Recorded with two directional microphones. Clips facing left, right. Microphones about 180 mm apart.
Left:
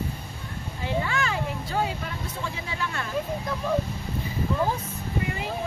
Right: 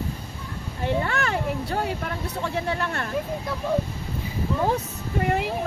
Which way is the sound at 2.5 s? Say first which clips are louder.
Right 6 dB; 60° right (ahead or behind).